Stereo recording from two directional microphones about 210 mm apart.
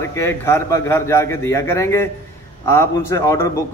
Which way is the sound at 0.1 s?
10° left (ahead or behind).